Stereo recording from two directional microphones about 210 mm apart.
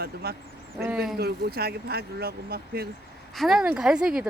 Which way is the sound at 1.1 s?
50° right (ahead or behind).